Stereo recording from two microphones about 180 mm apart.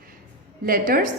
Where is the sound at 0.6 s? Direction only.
50° right (ahead or behind).